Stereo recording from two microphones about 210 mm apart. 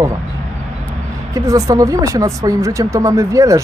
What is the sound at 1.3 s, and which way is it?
Speech, 15° right (ahead or behind).